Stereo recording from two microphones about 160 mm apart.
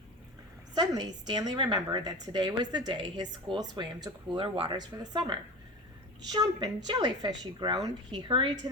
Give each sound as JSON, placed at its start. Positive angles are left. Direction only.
{"t": 0.7, "sound": "speech", "side_deg": -25}